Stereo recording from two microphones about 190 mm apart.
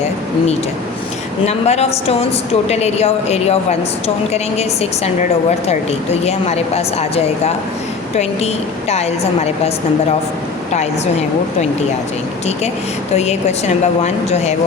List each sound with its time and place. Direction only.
1.5 s a woman's voice: 35° left (ahead or behind)
13.1 s a woman's voice: 35° left (ahead or behind)